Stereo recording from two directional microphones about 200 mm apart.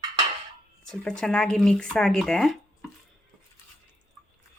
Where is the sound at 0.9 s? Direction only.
5° left (ahead or behind).